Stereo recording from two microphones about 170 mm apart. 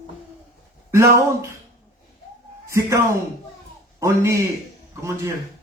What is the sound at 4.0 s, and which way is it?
Speech, 15° right (ahead or behind).